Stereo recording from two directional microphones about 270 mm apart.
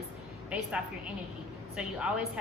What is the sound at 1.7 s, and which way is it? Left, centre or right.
Speech, centre.